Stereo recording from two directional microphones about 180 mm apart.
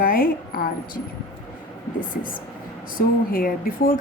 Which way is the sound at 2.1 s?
50° left (ahead or behind).